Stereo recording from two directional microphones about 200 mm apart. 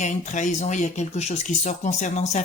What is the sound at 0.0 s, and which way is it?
Speech, 35° left (ahead or behind).